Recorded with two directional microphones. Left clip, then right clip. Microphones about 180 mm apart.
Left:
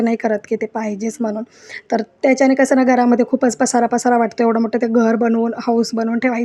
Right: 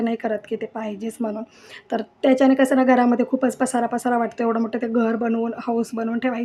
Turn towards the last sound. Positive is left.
turn(degrees=25)  # may be behind; listen again after turning